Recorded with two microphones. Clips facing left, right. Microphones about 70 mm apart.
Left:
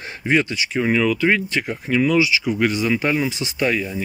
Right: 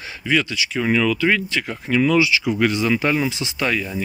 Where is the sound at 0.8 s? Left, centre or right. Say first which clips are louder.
Left 1 dB; centre.